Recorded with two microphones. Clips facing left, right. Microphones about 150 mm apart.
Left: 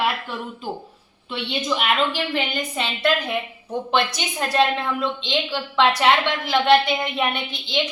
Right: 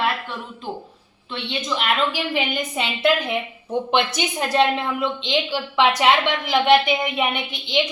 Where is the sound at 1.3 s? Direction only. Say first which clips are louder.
Left 2 dB; 5° left (ahead or behind).